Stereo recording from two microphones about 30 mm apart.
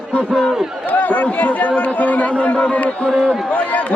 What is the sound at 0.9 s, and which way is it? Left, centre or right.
A man's voice, left.